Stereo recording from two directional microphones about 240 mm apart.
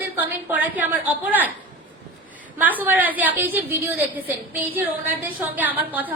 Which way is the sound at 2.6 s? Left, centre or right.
Centre.